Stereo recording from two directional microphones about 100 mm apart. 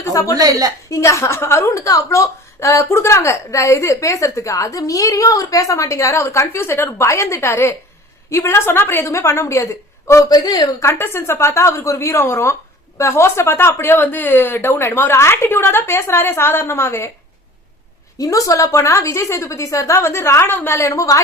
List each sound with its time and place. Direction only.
0.0 s a woman's voice: 35° left (ahead or behind)
0.3 s a woman's voice: 40° right (ahead or behind)
0.9 s a woman's voice: 30° left (ahead or behind)
10.8 s speech: 25° left (ahead or behind)
18.2 s a woman's voice: 35° left (ahead or behind)